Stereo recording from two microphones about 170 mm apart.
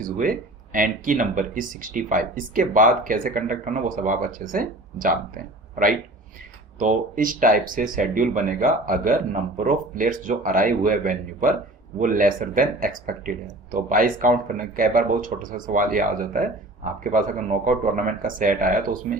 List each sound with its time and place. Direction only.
0.0 s speech: 55° right (ahead or behind)